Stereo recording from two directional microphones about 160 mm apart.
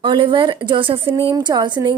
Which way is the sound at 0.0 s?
30° right (ahead or behind).